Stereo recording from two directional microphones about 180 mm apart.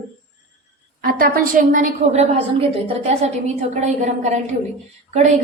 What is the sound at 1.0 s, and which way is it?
A woman's voice, 50° right (ahead or behind).